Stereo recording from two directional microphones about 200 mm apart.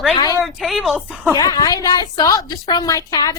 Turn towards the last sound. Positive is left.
turn(degrees=15)  # may be behind; listen again after turning